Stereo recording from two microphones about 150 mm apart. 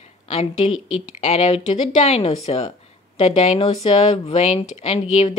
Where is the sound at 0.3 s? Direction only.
50° left (ahead or behind).